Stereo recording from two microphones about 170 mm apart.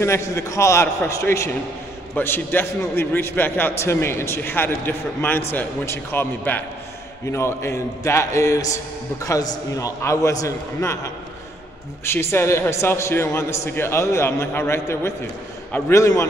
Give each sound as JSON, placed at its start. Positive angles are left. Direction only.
{"t": 0.0, "sound": "a man's voice", "side_deg": 15}
{"t": 12.0, "sound": "a man's voice", "side_deg": 15}